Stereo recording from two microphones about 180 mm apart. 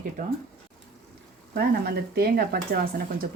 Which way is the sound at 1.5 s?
60° right (ahead or behind).